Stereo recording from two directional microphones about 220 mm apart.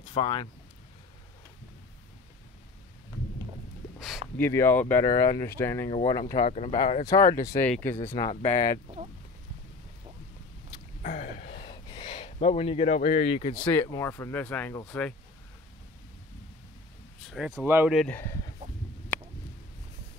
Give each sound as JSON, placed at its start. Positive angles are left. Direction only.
{"t": 0.0, "sound": "speech", "side_deg": 25}
{"t": 4.4, "sound": "speech", "side_deg": 10}
{"t": 6.4, "sound": "speech", "side_deg": 25}
{"t": 7.1, "sound": "speech", "side_deg": 15}
{"t": 8.1, "sound": "speech", "side_deg": 25}
{"t": 11.0, "sound": "a sound", "side_deg": 35}
{"t": 11.5, "sound": "a sound", "side_deg": 20}
{"t": 13.7, "sound": "speech", "side_deg": 10}
{"t": 17.3, "sound": "speech", "side_deg": 0}